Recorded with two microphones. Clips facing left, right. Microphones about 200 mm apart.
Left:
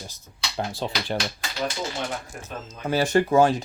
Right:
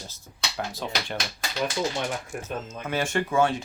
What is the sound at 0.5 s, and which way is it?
Speech, 30° left (ahead or behind).